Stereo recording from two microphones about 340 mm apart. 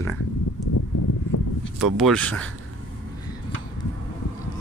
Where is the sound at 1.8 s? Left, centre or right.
Centre.